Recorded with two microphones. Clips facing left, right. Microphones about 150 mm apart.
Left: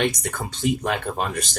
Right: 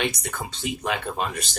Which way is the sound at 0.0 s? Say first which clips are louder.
Left 4 dB; 50° left (ahead or behind).